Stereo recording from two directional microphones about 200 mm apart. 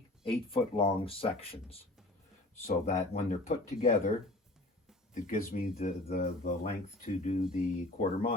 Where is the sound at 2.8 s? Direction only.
35° left (ahead or behind).